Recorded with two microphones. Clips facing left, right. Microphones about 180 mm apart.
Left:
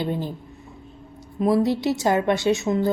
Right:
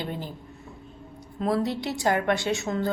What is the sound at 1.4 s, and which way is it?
A woman's voice, 20° left (ahead or behind).